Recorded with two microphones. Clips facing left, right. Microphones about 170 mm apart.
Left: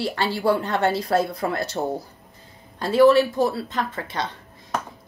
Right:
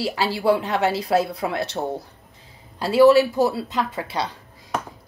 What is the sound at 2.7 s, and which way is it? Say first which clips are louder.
Speech: right 1 dB; 10° right (ahead or behind).